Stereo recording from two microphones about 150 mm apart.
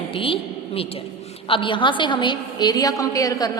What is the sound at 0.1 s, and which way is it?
A woman's voice, 35° left (ahead or behind).